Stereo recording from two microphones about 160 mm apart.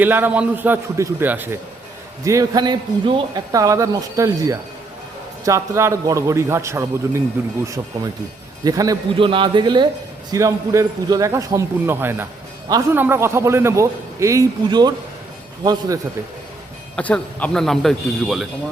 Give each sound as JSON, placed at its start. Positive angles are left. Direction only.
{"t": 0.0, "sound": "a man's voice", "side_deg": -10}
{"t": 7.9, "sound": "a man's voice", "side_deg": -25}
{"t": 9.1, "sound": "a man's voice", "side_deg": -30}
{"t": 16.9, "sound": "a man's voice", "side_deg": 10}